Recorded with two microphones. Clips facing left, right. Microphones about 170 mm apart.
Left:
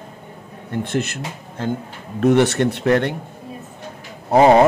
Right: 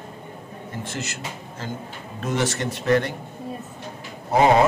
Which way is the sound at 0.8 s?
60° left (ahead or behind).